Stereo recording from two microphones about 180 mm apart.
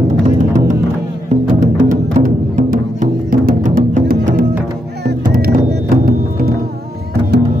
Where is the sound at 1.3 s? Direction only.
45° right (ahead or behind).